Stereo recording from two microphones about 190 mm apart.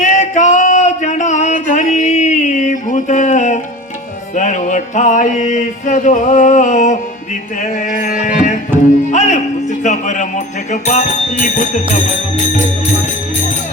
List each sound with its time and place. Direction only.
0.0 s a sound: 40° left (ahead or behind)
4.4 s music: 40° left (ahead or behind)
9.8 s speech: 40° left (ahead or behind)